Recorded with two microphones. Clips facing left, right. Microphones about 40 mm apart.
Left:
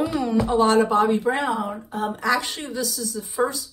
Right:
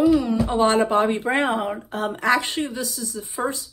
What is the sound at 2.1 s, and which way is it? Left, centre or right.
Speech, right.